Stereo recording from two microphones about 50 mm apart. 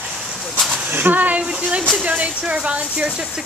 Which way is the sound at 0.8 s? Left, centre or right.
Right.